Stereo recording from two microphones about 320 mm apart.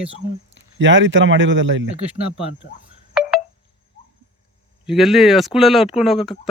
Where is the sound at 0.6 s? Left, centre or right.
Right.